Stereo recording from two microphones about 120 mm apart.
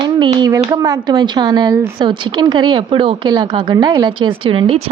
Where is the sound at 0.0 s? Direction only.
40° right (ahead or behind).